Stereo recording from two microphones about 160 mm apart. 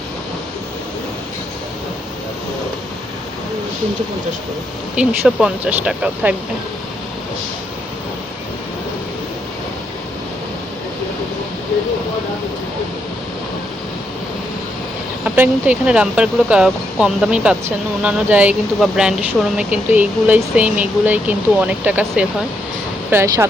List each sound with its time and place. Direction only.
4.9 s speech: 5° right (ahead or behind)
15.2 s speech: 10° right (ahead or behind)